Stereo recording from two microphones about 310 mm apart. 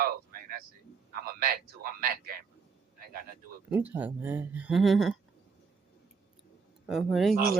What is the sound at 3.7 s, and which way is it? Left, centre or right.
Speech, centre.